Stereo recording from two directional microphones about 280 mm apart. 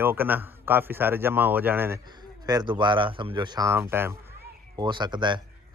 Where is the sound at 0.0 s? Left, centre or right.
Centre.